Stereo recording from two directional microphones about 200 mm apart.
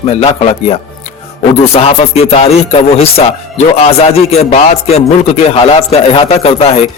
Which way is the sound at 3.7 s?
30° left (ahead or behind).